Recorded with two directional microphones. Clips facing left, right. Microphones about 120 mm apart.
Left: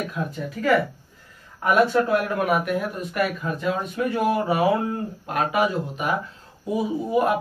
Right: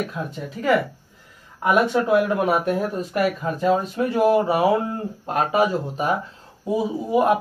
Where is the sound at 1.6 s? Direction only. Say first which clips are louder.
Even; 15° right (ahead or behind).